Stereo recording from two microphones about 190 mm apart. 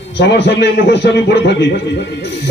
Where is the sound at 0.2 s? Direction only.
65° left (ahead or behind).